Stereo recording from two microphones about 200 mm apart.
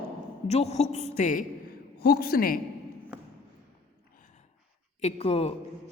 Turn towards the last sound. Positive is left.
turn(degrees=30)  # may be behind; listen again after turning